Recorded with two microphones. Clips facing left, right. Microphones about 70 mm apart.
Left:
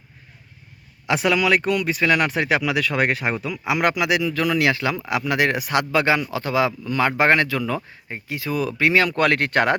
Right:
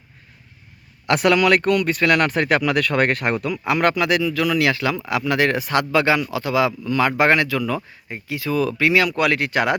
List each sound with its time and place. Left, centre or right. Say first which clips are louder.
1.0 s speech: right 3 dB; centre; by 8.9 s left
8.9 s speech: left 2 dB; left